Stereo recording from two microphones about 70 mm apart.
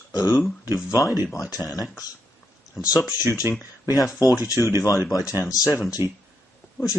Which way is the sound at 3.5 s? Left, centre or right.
Right.